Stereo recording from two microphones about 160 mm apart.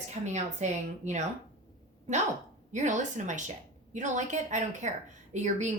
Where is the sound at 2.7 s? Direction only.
50° right (ahead or behind).